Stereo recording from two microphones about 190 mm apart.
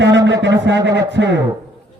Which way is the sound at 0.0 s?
65° right (ahead or behind).